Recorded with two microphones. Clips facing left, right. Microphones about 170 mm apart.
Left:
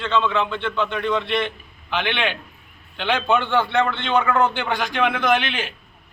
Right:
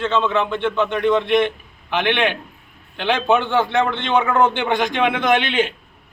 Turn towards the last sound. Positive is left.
turn(degrees=-20)  # may be behind; listen again after turning